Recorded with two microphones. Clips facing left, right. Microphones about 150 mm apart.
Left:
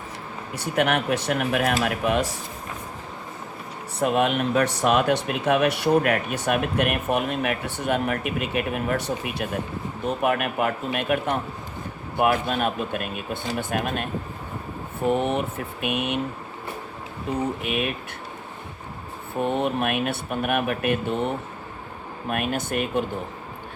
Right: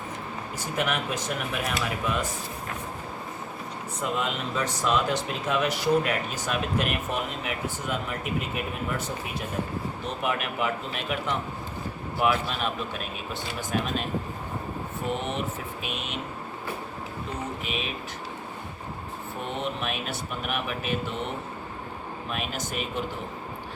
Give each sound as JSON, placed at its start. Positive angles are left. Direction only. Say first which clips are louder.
{"t": 0.5, "sound": "speech", "louder": "left 6 dB", "side_deg": 65}
{"t": 4.0, "sound": "speech", "louder": "left 8 dB", "side_deg": 65}
{"t": 10.2, "sound": "speech", "louder": "left 4 dB", "side_deg": 55}
{"t": 15.1, "sound": "speech", "louder": "left 7 dB", "side_deg": 50}
{"t": 17.7, "sound": "speech", "louder": "left 7 dB", "side_deg": 60}
{"t": 19.4, "sound": "speech", "louder": "left 9 dB", "side_deg": 50}
{"t": 22.3, "sound": "speech", "louder": "left 8 dB", "side_deg": 55}